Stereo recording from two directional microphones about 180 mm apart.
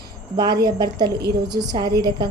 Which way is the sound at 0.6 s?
20° right (ahead or behind).